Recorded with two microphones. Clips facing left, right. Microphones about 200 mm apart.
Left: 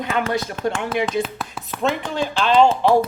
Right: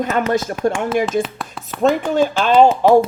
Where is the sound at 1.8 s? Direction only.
45° right (ahead or behind).